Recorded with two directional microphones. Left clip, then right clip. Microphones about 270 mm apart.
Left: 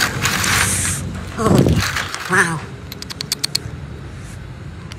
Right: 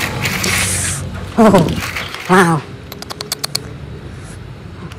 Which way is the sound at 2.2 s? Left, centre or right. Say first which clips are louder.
Right 5 dB; centre.